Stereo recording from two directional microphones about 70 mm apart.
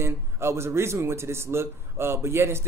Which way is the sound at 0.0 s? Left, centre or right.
Right.